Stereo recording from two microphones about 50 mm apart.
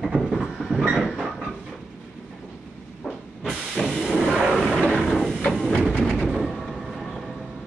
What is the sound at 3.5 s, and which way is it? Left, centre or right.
Hiss, centre.